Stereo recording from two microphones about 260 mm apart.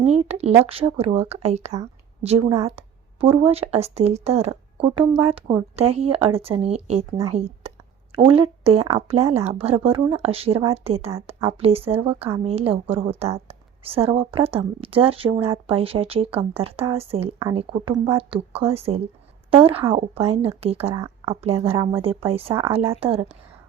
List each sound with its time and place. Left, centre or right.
0.0 s speech: right